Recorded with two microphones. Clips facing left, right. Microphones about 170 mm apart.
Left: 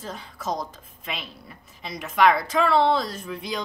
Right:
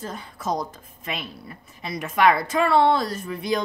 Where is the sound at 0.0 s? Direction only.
50° right (ahead or behind).